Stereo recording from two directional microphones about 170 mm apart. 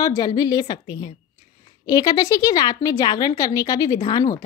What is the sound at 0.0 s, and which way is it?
A woman's voice, 20° left (ahead or behind).